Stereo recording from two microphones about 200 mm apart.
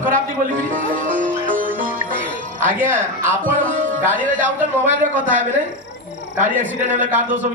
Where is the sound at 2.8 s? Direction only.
10° right (ahead or behind).